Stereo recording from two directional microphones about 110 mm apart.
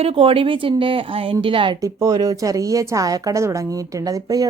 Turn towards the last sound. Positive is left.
turn(degrees=-35)  # may be behind; listen again after turning